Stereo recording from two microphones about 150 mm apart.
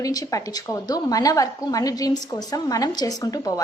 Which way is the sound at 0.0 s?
25° left (ahead or behind).